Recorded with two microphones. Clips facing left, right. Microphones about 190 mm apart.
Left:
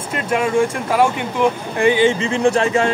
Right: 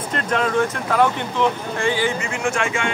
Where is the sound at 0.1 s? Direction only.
10° left (ahead or behind).